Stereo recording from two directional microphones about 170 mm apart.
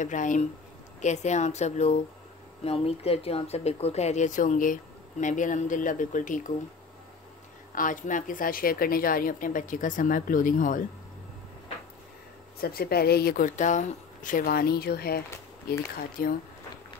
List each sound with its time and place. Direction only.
0.0 s a woman's voice: 50° left (ahead or behind)
7.7 s a woman's voice: 50° left (ahead or behind)
12.5 s speech: 60° left (ahead or behind)